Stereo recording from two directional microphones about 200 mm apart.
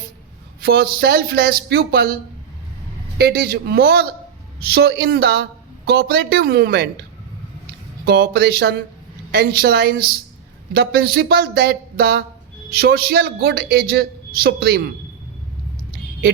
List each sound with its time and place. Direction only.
0.6 s speech: 50° right (ahead or behind)
3.2 s speech: 50° right (ahead or behind)
8.0 s speech: 55° right (ahead or behind)